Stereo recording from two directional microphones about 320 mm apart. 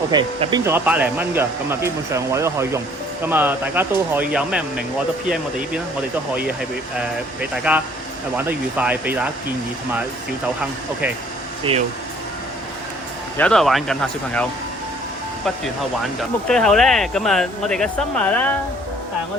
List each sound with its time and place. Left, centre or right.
0.1 s speech: centre
7.5 s speech: centre
11.7 s speech: centre
13.3 s speech: centre
16.5 s speech: centre